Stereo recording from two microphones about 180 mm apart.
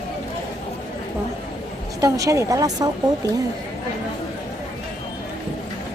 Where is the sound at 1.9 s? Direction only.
20° right (ahead or behind).